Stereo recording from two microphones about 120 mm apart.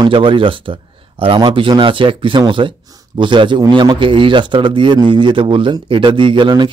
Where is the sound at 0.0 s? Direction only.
45° right (ahead or behind).